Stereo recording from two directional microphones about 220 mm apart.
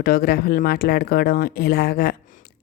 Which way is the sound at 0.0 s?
45° left (ahead or behind).